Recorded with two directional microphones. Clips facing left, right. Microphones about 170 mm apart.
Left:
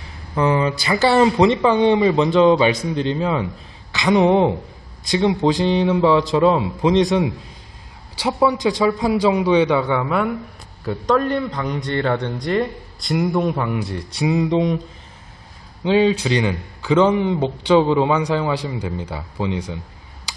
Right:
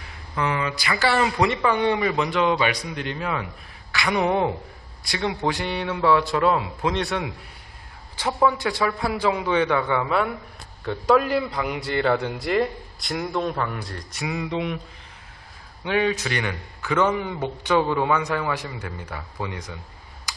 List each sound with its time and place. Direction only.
0.4 s a man's voice: 30° left (ahead or behind); by 14.0 s 10° left (ahead or behind)
14.1 s mantra: 30° left (ahead or behind)
15.8 s speech: 25° left (ahead or behind)
18.8 s speech: 15° left (ahead or behind)